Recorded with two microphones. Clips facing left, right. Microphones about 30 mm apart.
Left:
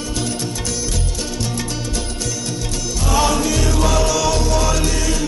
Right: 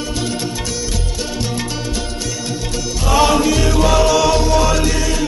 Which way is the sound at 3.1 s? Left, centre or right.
Right.